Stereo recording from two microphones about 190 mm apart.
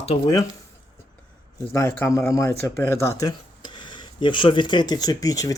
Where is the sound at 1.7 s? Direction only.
15° left (ahead or behind).